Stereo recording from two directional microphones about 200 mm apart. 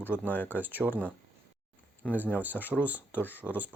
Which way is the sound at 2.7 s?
5° right (ahead or behind).